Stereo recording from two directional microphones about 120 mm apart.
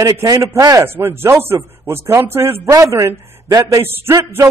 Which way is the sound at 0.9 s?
20° right (ahead or behind).